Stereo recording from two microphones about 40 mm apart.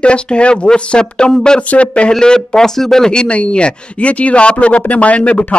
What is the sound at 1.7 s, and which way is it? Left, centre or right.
Speech, left.